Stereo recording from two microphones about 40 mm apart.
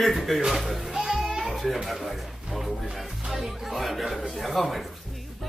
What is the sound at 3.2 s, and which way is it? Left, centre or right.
Music, centre.